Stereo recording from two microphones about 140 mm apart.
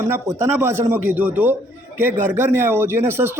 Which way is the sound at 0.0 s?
20° right (ahead or behind).